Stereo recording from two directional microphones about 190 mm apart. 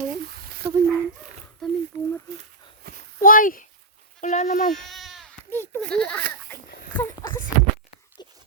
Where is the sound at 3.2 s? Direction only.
45° left (ahead or behind).